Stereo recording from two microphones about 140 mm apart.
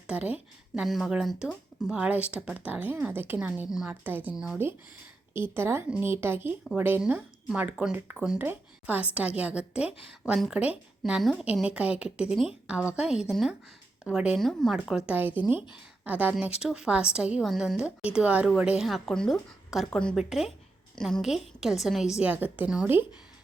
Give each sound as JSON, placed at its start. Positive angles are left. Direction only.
{"t": 0.1, "sound": "a woman's voice", "side_deg": -10}